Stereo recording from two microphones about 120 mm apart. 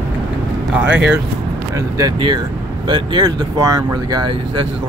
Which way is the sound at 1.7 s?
30° right (ahead or behind).